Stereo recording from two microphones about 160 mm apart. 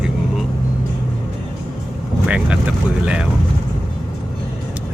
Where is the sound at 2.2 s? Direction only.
5° right (ahead or behind).